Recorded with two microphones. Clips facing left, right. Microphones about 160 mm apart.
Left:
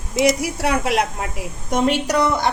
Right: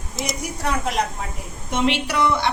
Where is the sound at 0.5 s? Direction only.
75° left (ahead or behind).